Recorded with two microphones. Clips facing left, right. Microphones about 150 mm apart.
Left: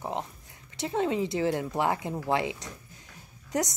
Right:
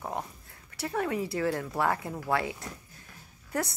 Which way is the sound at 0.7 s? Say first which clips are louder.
Left 3 dB; 20° left (ahead or behind).